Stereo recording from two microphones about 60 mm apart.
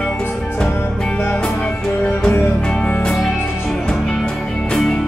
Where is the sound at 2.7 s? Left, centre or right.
Left.